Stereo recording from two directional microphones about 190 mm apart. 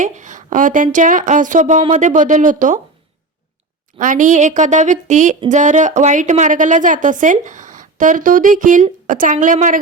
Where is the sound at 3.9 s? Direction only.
45° right (ahead or behind).